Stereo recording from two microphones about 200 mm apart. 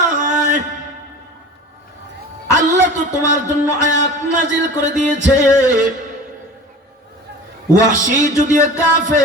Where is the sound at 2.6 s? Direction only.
40° right (ahead or behind).